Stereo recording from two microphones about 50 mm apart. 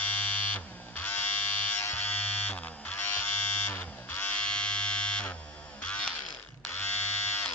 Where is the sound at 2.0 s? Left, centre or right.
Left.